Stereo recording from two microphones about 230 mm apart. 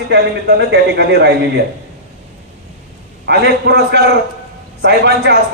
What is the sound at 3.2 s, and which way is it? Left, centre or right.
A man's voice, right.